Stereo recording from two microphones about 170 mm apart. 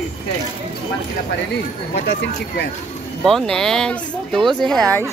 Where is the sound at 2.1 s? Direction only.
80° left.